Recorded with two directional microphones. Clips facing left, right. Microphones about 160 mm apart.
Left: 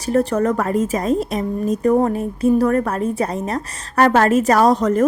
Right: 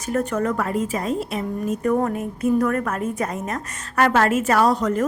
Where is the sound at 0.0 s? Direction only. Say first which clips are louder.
Left 5 dB; 35° left (ahead or behind).